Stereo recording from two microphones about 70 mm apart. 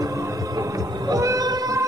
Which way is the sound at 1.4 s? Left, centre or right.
Right.